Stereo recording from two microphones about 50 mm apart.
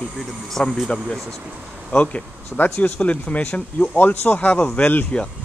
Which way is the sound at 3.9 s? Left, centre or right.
Left.